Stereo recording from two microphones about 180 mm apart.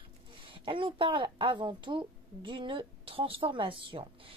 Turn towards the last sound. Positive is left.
turn(degrees=-30)  # may be behind; listen again after turning